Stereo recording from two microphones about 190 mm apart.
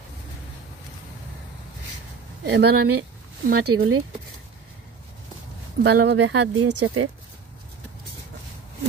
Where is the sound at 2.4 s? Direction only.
60° right (ahead or behind).